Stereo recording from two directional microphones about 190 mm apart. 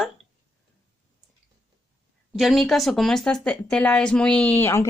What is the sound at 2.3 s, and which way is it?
Speech, centre (ahead or behind).